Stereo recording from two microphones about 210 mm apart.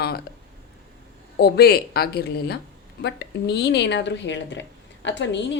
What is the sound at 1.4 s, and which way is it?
A woman's voice, 50° left (ahead or behind).